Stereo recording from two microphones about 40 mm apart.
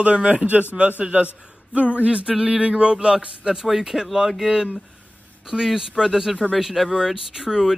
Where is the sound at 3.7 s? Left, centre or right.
Centre.